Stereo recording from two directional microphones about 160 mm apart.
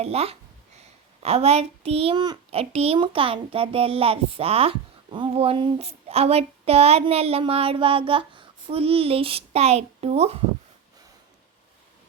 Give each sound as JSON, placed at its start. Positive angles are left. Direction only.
{"t": 0.0, "sound": "a child's voice", "side_deg": -40}
{"t": 2.5, "sound": "a child's voice", "side_deg": -40}